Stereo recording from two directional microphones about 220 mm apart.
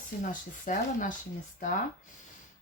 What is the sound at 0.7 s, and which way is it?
Speech, 35° left (ahead or behind).